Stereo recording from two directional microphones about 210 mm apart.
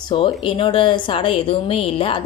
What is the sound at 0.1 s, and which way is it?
Speech, 25° left (ahead or behind).